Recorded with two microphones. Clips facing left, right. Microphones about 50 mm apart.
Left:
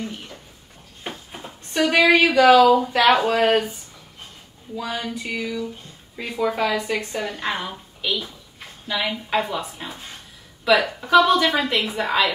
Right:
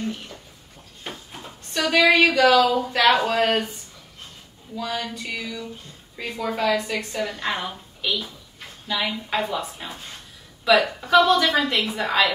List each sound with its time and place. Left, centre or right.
1.7 s speech: centre
2.0 s a woman's voice: centre
2.4 s speech: centre
2.9 s a woman's voice: centre
4.7 s a woman's voice: centre